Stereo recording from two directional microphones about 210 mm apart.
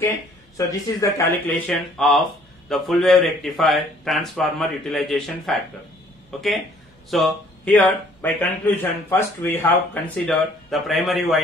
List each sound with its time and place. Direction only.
0.6 s a man's voice: 15° left (ahead or behind)
1.7 s speech: centre (ahead or behind)
7.1 s speech: centre (ahead or behind)